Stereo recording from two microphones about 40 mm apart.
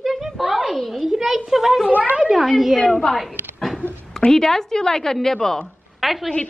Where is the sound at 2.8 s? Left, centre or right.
Centre.